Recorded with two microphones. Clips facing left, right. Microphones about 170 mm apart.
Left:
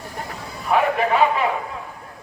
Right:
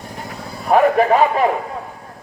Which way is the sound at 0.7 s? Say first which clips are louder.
Right 6 dB; 40° right (ahead or behind).